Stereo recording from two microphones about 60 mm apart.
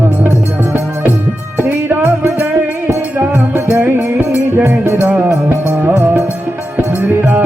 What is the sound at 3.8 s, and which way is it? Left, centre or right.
Music, right.